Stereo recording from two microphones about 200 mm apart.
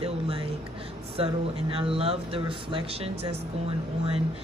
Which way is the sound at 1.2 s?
30° right (ahead or behind).